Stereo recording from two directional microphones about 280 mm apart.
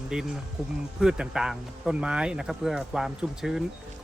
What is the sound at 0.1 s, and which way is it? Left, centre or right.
Speech, centre.